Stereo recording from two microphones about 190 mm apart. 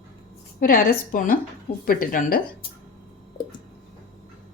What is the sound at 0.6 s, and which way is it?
A woman's voice, 50° left (ahead or behind).